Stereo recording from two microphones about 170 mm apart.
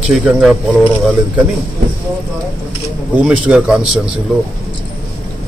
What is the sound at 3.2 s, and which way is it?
Speech, 5° right (ahead or behind).